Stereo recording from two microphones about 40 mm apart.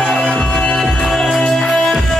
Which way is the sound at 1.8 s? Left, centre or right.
Centre.